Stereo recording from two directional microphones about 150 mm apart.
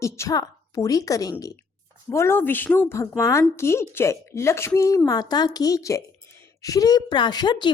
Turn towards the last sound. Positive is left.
turn(degrees=30)  # may be behind; listen again after turning